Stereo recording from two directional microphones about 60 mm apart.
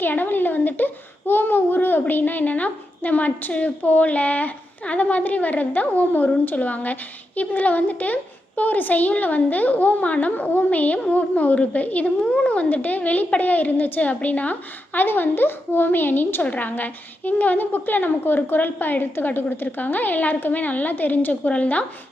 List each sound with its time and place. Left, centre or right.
0.0 s a woman's voice: left